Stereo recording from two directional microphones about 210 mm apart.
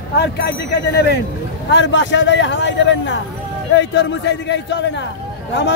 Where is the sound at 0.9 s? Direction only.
50° left (ahead or behind).